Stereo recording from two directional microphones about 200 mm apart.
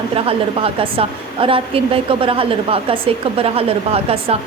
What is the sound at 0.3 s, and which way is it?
A woman's voice, 30° right (ahead or behind).